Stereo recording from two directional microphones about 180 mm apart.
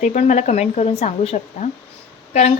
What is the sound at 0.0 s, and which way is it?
A woman's voice, 40° left (ahead or behind).